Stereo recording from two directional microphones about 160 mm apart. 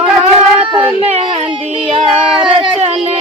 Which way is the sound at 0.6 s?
35° right (ahead or behind).